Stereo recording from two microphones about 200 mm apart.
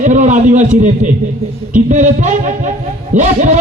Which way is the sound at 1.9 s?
35° right (ahead or behind).